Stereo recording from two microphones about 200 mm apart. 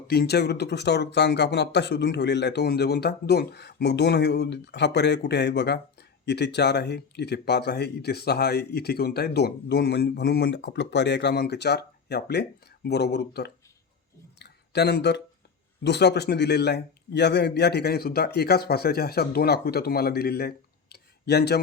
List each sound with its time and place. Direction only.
0.1 s speech: 55° left (ahead or behind)
14.3 s a sound: 55° left (ahead or behind)
15.8 s a man's voice: 60° left (ahead or behind)
20.9 s tick: 55° left (ahead or behind)